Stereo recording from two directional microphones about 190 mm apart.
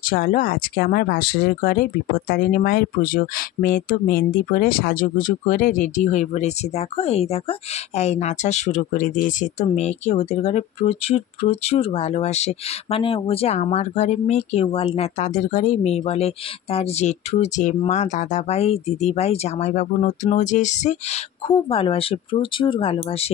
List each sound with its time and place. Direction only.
0.0 s speech: 50° left (ahead or behind); by 23.3 s 30° left (ahead or behind)